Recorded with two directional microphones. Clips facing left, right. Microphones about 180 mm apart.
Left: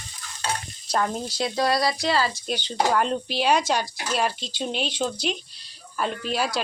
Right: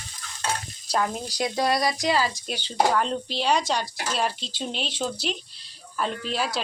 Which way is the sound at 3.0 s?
5° left (ahead or behind).